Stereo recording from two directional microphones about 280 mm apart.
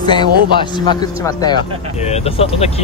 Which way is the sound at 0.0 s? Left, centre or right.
Centre.